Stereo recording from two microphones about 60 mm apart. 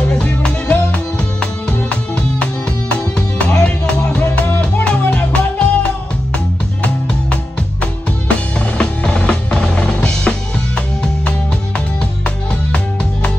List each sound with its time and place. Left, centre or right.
0.1 s music: centre
8.5 s music: centre
9.8 s drum: centre